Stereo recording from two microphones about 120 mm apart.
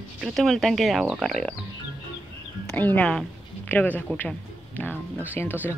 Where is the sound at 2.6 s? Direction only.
15° left (ahead or behind).